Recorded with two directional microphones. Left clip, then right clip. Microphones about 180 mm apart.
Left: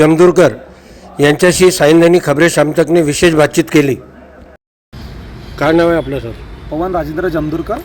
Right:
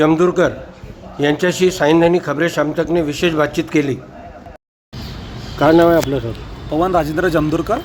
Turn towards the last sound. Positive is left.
turn(degrees=-10)  # may be behind; listen again after turning